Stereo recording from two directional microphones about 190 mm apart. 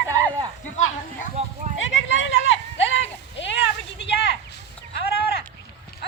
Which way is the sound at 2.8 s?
70° left (ahead or behind).